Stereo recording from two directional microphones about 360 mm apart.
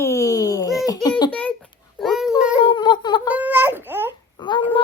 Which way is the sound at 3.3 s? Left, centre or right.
Centre.